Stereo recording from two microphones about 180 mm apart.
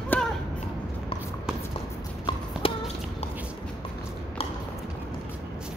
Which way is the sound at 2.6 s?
30° left (ahead or behind).